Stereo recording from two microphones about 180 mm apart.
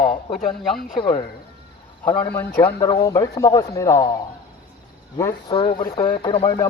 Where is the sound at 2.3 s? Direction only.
10° left (ahead or behind).